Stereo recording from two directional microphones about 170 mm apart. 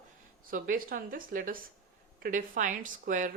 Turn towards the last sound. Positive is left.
turn(degrees=-50)  # may be behind; listen again after turning